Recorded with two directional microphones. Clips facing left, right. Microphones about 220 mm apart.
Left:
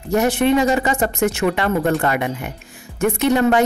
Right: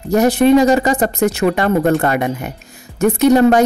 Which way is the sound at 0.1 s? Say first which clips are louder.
Right 5 dB; 40° right (ahead or behind).